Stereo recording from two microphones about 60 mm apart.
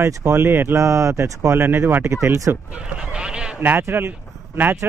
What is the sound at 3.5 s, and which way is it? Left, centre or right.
Speech, right.